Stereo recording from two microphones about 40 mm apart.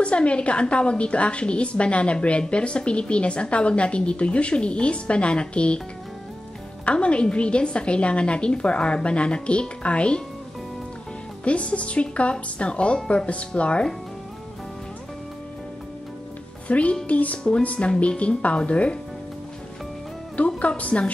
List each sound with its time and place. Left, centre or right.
0.0 s a woman's voice: left
6.8 s a woman's voice: left
11.4 s a woman's voice: left
16.6 s a woman's voice: left
20.4 s a woman's voice: left